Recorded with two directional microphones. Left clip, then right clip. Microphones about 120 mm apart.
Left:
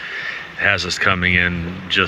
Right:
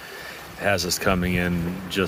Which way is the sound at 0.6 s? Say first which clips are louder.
Left 6 dB; centre (ahead or behind).